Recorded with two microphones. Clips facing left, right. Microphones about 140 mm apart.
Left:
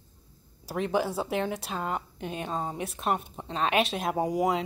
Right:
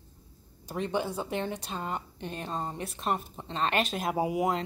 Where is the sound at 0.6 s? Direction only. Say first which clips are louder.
Left 3 dB; 5° left (ahead or behind).